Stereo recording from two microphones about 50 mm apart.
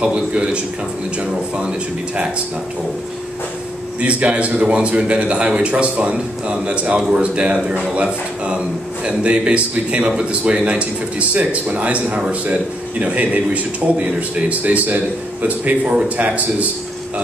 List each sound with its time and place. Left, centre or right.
0.0 s a man's voice: right
4.0 s a man's voice: right